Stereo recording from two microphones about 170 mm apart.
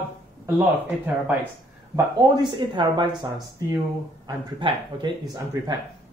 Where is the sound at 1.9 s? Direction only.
25° right (ahead or behind).